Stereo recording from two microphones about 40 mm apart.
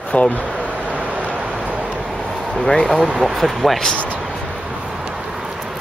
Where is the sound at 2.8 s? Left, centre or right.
Centre.